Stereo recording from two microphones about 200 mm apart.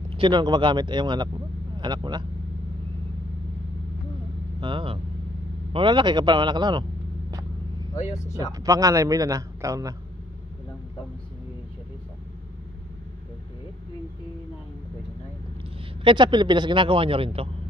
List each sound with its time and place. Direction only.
0.2 s a man's voice: 20° right (ahead or behind)
4.6 s speech: 25° right (ahead or behind)
7.9 s speech: 15° left (ahead or behind)
8.5 s speech: 20° right (ahead or behind)
16.0 s a man's voice: 25° right (ahead or behind)